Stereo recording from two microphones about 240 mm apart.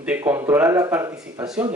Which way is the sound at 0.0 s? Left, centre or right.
Centre.